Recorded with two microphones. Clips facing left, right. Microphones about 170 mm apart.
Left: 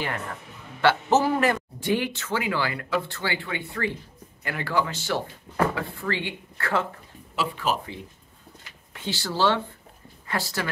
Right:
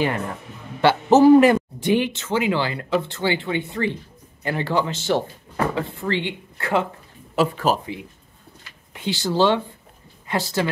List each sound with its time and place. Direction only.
0.7 s speech: 20° right (ahead or behind)
7.3 s speech: 40° right (ahead or behind)
7.8 s a woman's voice: 15° right (ahead or behind)